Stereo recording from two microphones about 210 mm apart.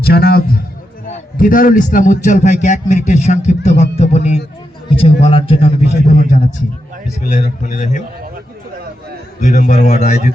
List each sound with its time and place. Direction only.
0.0 s a man's voice: 50° left (ahead or behind)
9.4 s a man's voice: 35° left (ahead or behind)